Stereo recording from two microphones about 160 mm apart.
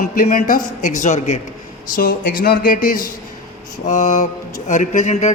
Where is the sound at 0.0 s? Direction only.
60° left (ahead or behind).